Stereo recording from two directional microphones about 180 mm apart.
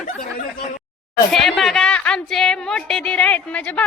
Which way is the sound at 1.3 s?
Centre (ahead or behind).